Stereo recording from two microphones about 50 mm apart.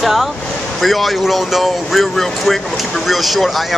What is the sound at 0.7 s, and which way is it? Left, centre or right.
Speech, centre.